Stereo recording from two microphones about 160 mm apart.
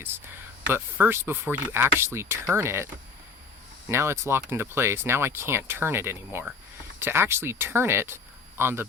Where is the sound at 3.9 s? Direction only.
15° right (ahead or behind).